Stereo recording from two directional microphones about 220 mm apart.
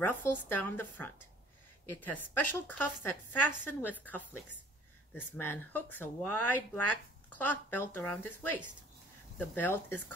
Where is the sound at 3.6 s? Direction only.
10° left (ahead or behind).